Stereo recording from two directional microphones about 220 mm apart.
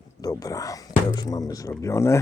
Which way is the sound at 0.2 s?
15° left (ahead or behind).